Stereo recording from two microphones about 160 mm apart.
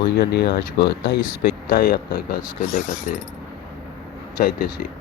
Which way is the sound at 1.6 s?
65° left (ahead or behind).